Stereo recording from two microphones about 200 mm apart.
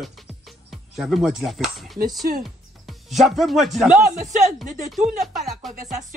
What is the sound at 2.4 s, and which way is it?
Speech, centre (ahead or behind).